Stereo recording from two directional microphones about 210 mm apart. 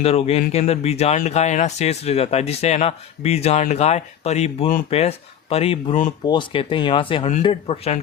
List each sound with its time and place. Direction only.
0.0 s speech: 30° left (ahead or behind)